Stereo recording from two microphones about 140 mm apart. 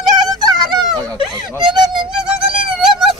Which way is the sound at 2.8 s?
5° right (ahead or behind).